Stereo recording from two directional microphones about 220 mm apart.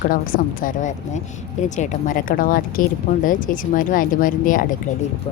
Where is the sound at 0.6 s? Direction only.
35° left (ahead or behind).